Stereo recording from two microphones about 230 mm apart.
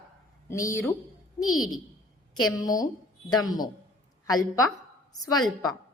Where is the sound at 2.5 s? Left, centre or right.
Centre.